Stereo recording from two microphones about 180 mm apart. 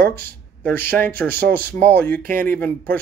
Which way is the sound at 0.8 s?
10° left (ahead or behind).